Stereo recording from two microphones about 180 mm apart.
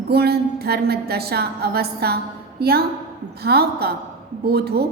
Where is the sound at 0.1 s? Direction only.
60° right (ahead or behind).